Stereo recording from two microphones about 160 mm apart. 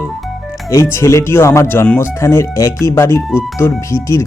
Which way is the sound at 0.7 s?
15° left (ahead or behind).